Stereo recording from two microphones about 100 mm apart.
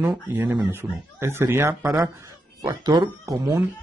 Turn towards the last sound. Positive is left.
turn(degrees=-35)  # may be behind; listen again after turning